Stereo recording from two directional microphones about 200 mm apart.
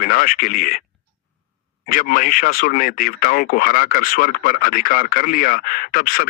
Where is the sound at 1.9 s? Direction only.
45° left (ahead or behind).